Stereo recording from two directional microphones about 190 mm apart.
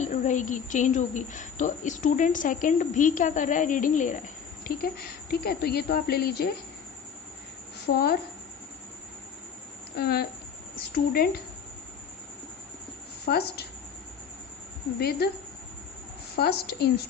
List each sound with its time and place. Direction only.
0.0 s a woman's voice: 40° left (ahead or behind)
4.6 s speech: 55° left (ahead or behind)
7.9 s speech: 55° left (ahead or behind)
10.0 s speech: 55° left (ahead or behind)
13.2 s speech: 55° left (ahead or behind)
14.9 s speech: 55° left (ahead or behind)
16.3 s speech: 55° left (ahead or behind)